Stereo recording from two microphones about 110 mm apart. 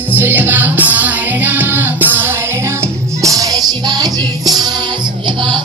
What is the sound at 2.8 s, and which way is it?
Music, 30° right (ahead or behind).